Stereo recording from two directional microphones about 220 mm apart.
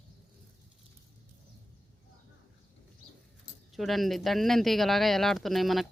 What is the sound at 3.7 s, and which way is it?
Speech, centre (ahead or behind).